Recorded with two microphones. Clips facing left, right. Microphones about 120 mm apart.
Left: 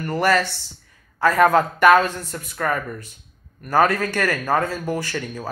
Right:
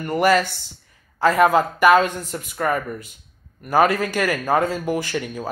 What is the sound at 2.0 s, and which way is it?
A man's voice, 15° right (ahead or behind).